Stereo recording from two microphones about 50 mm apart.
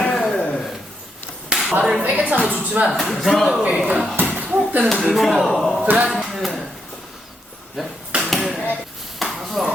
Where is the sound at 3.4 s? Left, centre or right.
Centre.